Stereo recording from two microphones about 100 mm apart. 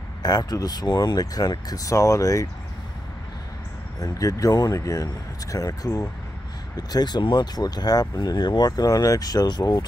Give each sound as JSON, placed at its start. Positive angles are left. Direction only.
{"t": 0.2, "sound": "speech", "side_deg": 40}
{"t": 4.0, "sound": "speech", "side_deg": 35}